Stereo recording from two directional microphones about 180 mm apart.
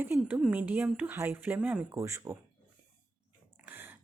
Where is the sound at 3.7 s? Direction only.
10° right (ahead or behind).